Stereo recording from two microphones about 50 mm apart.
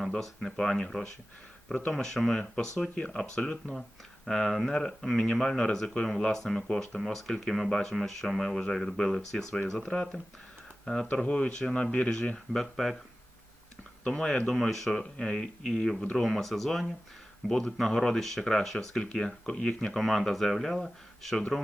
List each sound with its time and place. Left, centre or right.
0.1 s speech: centre
2.9 s speech: centre
4.3 s speech: centre
11.1 s speech: centre
12.5 s speech: centre
14.0 s speech: centre
16.0 s speech: left
16.2 s speech: centre
19.1 s speech: centre
19.9 s speech: centre